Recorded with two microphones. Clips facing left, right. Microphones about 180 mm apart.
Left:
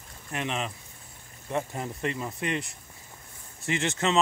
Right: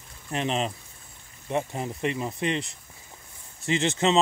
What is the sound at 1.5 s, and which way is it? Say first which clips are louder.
Speech: right 2 dB; 20° right (ahead or behind).